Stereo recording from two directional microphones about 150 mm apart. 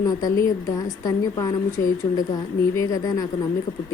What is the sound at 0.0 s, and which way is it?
A woman's voice, 25° left (ahead or behind).